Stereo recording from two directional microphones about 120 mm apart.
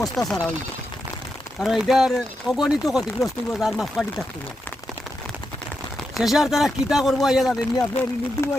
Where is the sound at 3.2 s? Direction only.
25° left (ahead or behind).